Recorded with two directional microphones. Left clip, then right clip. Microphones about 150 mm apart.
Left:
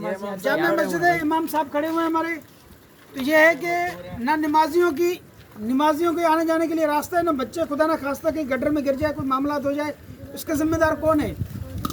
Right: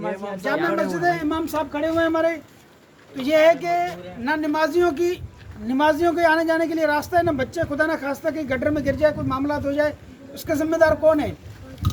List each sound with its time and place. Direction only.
0.0 s speech: 20° left (ahead or behind)
1.3 s a woman's voice: 10° right (ahead or behind)
3.2 s speech: 5° left (ahead or behind)
5.6 s a woman's voice: 20° right (ahead or behind)